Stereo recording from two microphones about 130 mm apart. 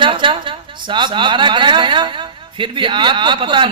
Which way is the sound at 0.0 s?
40° right (ahead or behind).